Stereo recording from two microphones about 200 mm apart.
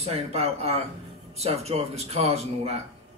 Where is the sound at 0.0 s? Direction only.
30° right (ahead or behind).